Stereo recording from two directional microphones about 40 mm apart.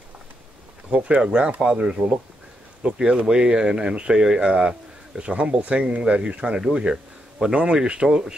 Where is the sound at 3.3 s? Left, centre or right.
Centre.